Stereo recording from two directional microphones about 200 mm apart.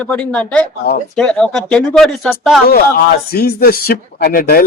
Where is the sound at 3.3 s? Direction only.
50° left (ahead or behind).